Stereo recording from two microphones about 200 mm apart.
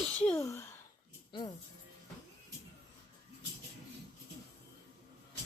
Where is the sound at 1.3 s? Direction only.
25° left (ahead or behind).